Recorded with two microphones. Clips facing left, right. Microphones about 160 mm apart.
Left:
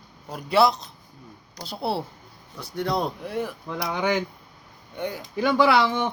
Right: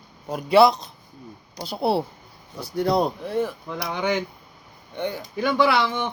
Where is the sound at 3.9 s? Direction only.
25° right (ahead or behind).